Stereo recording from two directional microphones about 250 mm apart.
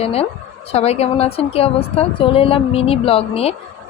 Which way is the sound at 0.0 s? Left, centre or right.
Left.